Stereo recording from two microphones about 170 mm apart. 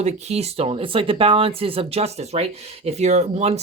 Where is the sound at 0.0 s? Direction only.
40° right (ahead or behind).